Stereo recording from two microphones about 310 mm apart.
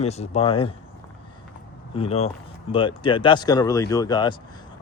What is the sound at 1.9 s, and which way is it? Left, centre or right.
Speech, centre.